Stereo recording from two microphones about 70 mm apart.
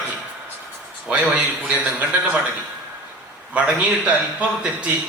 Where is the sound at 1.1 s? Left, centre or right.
Centre.